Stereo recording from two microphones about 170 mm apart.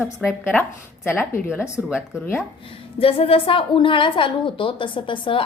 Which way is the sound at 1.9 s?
15° left (ahead or behind).